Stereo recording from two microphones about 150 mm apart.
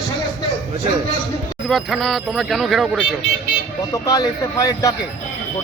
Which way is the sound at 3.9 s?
20° left (ahead or behind).